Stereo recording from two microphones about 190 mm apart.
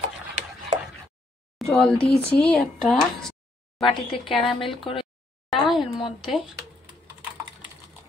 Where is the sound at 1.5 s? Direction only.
5° left (ahead or behind).